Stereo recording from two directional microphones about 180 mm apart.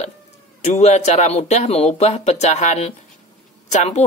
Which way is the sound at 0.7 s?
35° left (ahead or behind).